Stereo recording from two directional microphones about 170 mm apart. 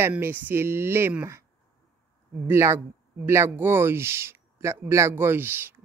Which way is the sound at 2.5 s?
15° right (ahead or behind).